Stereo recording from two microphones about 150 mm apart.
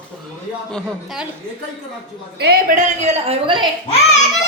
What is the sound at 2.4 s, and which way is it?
Speech, 90° right.